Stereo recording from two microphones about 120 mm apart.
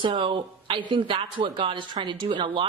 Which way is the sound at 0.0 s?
45° right (ahead or behind).